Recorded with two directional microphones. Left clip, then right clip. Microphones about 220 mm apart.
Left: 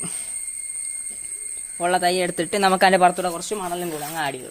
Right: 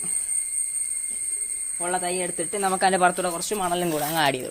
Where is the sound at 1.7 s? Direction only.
50° left (ahead or behind); by 3.0 s 30° left (ahead or behind).